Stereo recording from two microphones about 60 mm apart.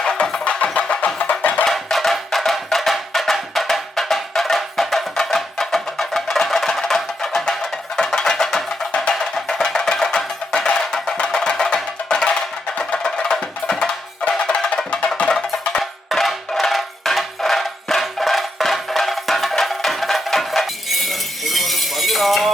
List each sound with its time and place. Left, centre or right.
0.0 s music: centre; by 1.6 s left
1.6 s music: centre
15.8 s music: centre